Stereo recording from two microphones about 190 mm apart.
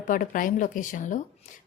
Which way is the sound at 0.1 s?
45° left (ahead or behind).